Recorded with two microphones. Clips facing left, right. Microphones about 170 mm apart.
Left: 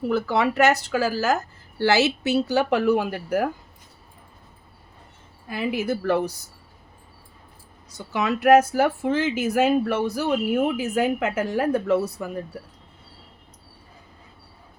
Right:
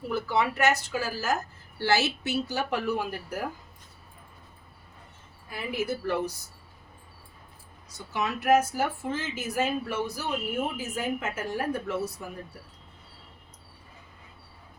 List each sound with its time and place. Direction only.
0.1 s speech: 70° left (ahead or behind)
5.5 s speech: 80° left
8.1 s speech: 90° left